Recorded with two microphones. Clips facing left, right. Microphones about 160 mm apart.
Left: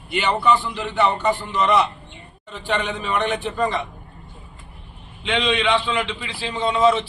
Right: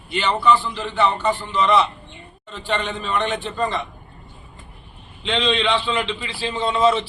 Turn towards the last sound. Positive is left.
turn(degrees=0)  # may be behind; listen again after turning